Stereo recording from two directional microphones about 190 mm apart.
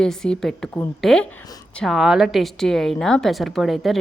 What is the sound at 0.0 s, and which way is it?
A woman's voice, 5° left (ahead or behind).